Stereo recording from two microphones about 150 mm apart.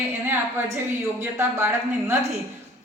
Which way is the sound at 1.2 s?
15° right (ahead or behind).